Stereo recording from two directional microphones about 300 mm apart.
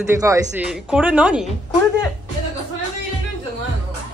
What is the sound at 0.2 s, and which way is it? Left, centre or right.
Speech, centre.